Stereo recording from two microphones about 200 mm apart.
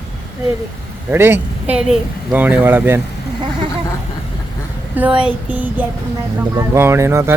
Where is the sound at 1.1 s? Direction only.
10° right (ahead or behind).